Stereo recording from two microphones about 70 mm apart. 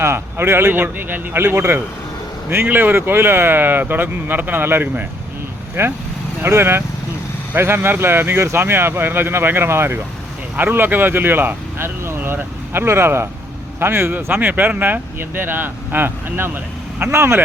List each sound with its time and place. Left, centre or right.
0.0 s speech: right
0.7 s speech: right